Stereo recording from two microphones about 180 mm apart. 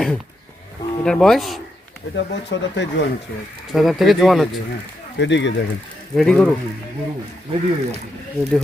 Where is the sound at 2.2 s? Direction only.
80° left.